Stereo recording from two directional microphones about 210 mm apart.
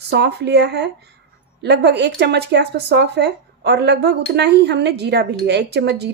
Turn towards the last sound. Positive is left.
turn(degrees=-50)  # may be behind; listen again after turning